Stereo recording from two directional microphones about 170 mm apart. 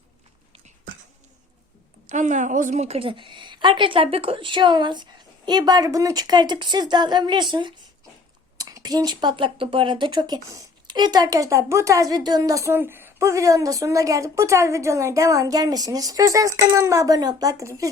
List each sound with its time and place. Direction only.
2.0 s speech: 45° right (ahead or behind); by 17.8 s 20° right (ahead or behind)